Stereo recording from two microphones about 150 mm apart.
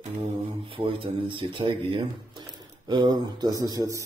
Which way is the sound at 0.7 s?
35° right (ahead or behind).